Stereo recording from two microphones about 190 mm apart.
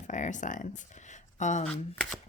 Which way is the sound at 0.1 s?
40° left (ahead or behind).